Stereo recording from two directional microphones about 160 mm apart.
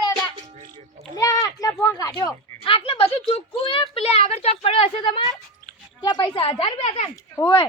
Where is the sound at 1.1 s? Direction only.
20° left (ahead or behind).